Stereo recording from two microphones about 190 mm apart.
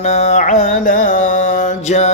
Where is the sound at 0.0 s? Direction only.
35° left (ahead or behind).